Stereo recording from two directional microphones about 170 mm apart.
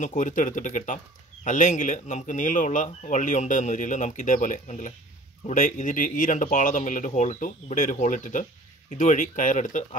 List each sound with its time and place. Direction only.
0.0 s speech: 45° left (ahead or behind)